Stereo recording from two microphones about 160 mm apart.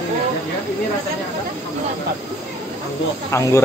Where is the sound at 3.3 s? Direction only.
15° left (ahead or behind).